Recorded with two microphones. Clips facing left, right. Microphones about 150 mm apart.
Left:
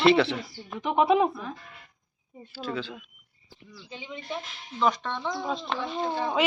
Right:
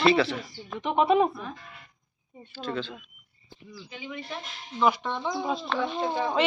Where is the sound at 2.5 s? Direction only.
10° left (ahead or behind).